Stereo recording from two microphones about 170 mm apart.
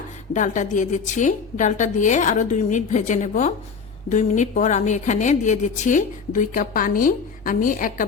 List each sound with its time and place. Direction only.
0.3 s a woman's voice: 45° left (ahead or behind)